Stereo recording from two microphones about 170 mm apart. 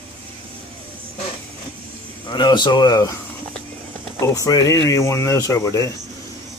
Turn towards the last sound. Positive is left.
turn(degrees=20)  # may be behind; listen again after turning